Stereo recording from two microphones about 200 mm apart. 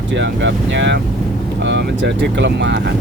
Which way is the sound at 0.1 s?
65° right (ahead or behind).